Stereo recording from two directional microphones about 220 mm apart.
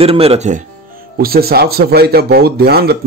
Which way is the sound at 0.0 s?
25° right (ahead or behind).